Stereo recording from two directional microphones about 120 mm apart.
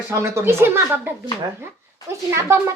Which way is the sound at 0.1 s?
20° right (ahead or behind).